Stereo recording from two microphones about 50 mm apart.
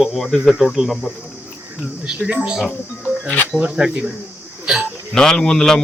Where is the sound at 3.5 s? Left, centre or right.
Right.